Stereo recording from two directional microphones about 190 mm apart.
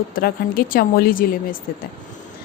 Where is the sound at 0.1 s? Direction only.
50° left (ahead or behind).